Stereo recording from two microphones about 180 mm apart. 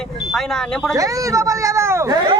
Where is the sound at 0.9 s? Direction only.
20° right (ahead or behind).